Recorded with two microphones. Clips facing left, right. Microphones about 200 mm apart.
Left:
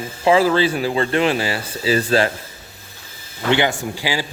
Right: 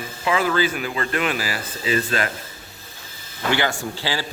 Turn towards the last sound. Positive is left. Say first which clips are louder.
# left 3 dB
turn(degrees=15)  # may be behind; listen again after turning